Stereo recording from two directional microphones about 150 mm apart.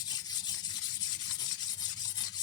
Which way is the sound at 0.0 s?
25° left (ahead or behind).